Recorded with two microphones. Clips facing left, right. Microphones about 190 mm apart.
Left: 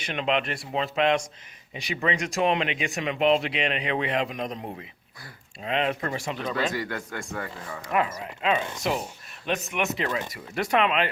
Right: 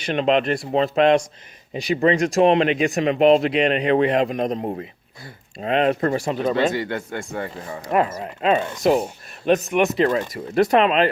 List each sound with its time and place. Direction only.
0.0 s speech: 35° right (ahead or behind)
6.4 s speech: 25° right (ahead or behind)